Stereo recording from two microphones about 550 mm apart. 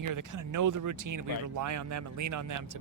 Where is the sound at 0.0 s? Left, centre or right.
Right.